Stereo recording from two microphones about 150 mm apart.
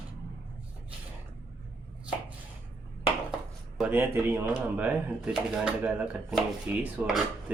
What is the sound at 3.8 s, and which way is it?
Speech, 10° right (ahead or behind).